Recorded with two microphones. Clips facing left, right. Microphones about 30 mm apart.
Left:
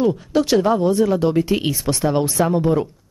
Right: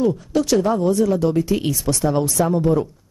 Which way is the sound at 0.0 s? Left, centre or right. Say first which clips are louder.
Left 1 dB; left.